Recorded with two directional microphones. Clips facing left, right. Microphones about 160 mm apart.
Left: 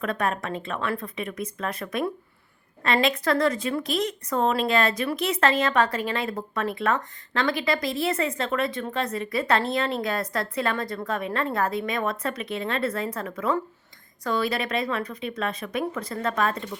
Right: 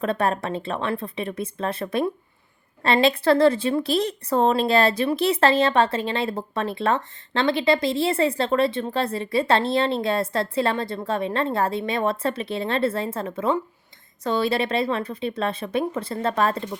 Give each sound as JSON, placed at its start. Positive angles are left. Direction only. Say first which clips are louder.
{"t": 0.0, "sound": "a woman's voice", "louder": "right 4 dB", "side_deg": -30}